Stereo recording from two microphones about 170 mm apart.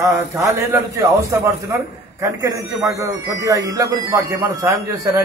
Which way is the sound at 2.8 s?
15° right (ahead or behind).